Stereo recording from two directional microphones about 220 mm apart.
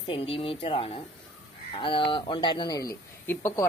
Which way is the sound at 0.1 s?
25° left (ahead or behind).